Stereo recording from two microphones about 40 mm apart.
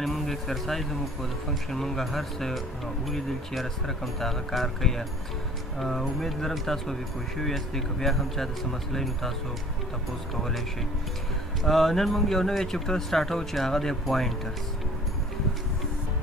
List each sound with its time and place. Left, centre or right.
0.0 s speech: centre
10.3 s speech: centre
11.6 s speech: centre